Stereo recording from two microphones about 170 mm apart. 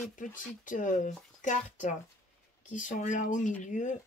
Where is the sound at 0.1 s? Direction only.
50° left (ahead or behind).